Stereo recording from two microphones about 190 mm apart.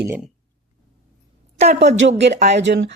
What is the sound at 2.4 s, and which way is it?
Speech, 65° right (ahead or behind).